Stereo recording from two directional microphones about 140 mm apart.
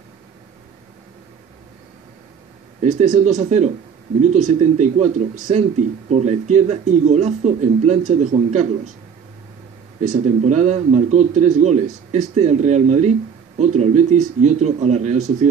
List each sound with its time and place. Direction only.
2.8 s a man's voice: 55° right (ahead or behind)
10.0 s a man's voice: 55° right (ahead or behind)